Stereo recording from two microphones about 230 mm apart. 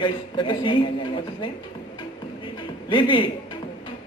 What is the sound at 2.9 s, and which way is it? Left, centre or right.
Speech, left.